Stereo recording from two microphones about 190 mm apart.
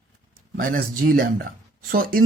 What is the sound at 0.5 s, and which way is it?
Speech, 50° right (ahead or behind).